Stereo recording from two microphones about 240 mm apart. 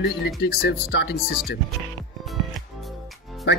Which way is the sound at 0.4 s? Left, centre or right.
Left.